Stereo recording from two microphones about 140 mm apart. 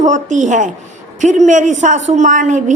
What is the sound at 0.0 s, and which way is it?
A woman's voice, 60° right (ahead or behind).